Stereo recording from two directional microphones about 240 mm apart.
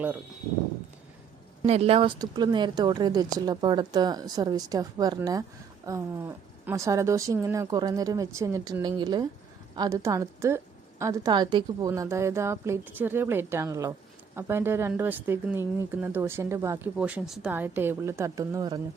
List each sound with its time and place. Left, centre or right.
1.6 s speech: right